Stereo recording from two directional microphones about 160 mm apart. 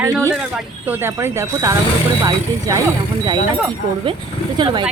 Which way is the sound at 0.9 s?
15° right (ahead or behind).